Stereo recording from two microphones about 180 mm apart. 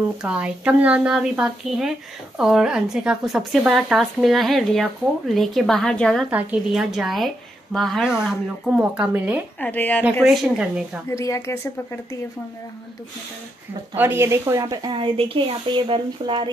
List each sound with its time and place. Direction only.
0.2 s speech: 5° right (ahead or behind)
9.6 s speech: 10° left (ahead or behind)
10.2 s speech: centre (ahead or behind)
11.1 s speech: 15° left (ahead or behind)
13.9 s a woman's voice: 10° right (ahead or behind)